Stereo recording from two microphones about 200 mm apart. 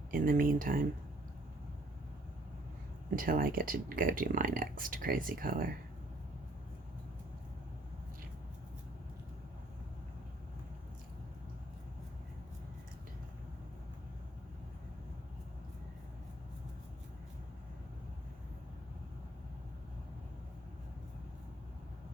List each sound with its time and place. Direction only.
0.1 s speech: 45° right (ahead or behind)
3.2 s speech: 45° right (ahead or behind)